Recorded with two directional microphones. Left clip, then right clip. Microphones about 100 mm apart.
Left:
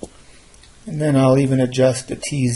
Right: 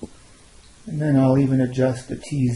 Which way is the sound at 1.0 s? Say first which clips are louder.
Left 4 dB; 20° left (ahead or behind).